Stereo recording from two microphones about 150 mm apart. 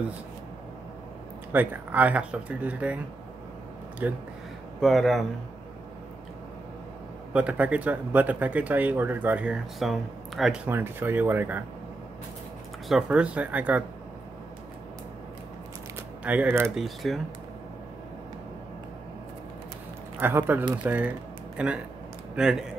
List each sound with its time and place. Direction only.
1.5 s speech: 10° right (ahead or behind)
4.0 s speech: 10° right (ahead or behind)
4.7 s a man's voice: centre (ahead or behind)
7.3 s speech: 10° right (ahead or behind)
12.8 s speech: 5° right (ahead or behind)
16.3 s speech: 10° right (ahead or behind)
16.7 s a man's voice: centre (ahead or behind)
20.2 s a man's voice: 15° right (ahead or behind)